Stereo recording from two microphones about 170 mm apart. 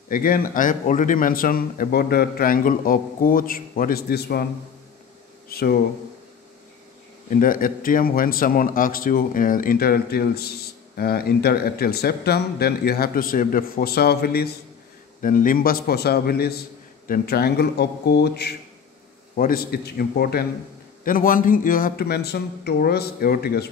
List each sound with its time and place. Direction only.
0.1 s speech: 55° left (ahead or behind)
5.5 s speech: 65° left (ahead or behind)
7.2 s speech: 55° left (ahead or behind)
15.2 s a man's voice: 55° left (ahead or behind); by 18.5 s 75° left (ahead or behind)
19.3 s speech: 60° left (ahead or behind)